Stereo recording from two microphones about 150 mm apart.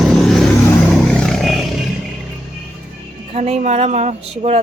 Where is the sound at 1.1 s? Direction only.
Centre (ahead or behind).